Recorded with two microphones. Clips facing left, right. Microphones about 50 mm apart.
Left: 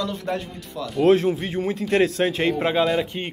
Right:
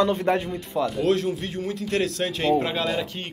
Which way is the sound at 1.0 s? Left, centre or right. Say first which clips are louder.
Left 5 dB; left.